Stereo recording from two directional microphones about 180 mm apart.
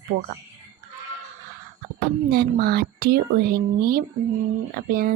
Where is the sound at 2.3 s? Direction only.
60° right (ahead or behind).